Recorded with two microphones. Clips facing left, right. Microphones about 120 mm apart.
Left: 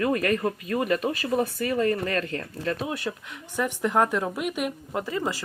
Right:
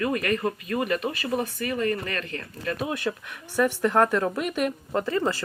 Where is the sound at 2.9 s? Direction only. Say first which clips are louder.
Right 2 dB; 20° left (ahead or behind).